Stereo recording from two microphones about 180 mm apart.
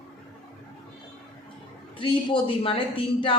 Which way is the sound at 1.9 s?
30° left (ahead or behind).